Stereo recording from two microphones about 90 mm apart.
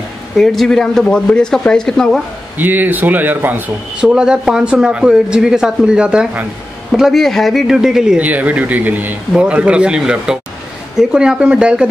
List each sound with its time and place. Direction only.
0.4 s speech: 5° left (ahead or behind)
2.5 s speech: 20° right (ahead or behind)
4.0 s speech: 10° right (ahead or behind)
6.9 s speech: centre (ahead or behind)